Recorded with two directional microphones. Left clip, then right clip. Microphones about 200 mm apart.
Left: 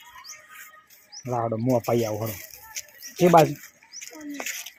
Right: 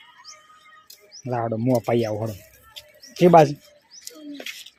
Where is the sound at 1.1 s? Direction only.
10° right (ahead or behind).